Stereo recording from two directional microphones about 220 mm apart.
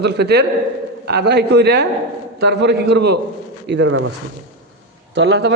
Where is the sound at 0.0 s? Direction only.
50° right (ahead or behind).